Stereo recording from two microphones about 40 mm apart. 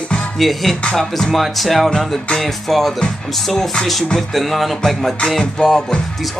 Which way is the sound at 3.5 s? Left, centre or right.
Centre.